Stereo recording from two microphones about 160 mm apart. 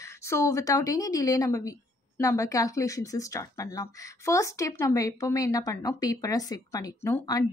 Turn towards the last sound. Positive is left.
turn(degrees=20)  # may be behind; listen again after turning